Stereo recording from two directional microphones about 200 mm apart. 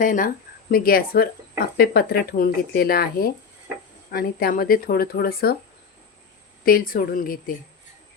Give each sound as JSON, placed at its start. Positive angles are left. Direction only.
{"t": 0.0, "sound": "speech", "side_deg": 45}
{"t": 6.7, "sound": "speech", "side_deg": 45}